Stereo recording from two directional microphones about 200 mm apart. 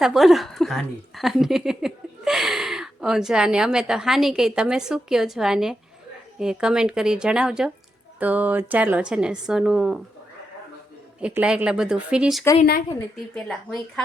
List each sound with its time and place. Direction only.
0.0 s a woman's voice: centre (ahead or behind)
11.2 s a woman's voice: 5° right (ahead or behind)